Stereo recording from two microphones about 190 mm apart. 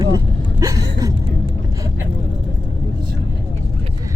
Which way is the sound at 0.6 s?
20° right (ahead or behind).